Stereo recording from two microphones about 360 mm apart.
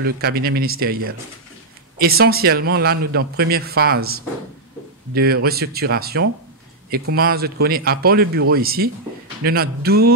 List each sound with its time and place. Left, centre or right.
0.0 s a man's voice: right